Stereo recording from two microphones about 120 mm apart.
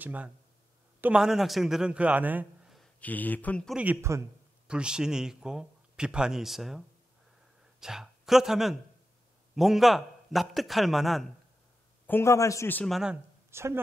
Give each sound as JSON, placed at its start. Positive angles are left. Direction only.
{"t": 0.0, "sound": "a man's voice", "side_deg": -15}
{"t": 3.0, "sound": "speech", "side_deg": 15}
{"t": 3.7, "sound": "a man's voice", "side_deg": -15}
{"t": 4.6, "sound": "a man's voice", "side_deg": -5}
{"t": 7.8, "sound": "a man's voice", "side_deg": -5}
{"t": 12.1, "sound": "a man's voice", "side_deg": 20}
{"t": 12.8, "sound": "a man's voice", "side_deg": -5}
{"t": 13.5, "sound": "speech", "side_deg": -20}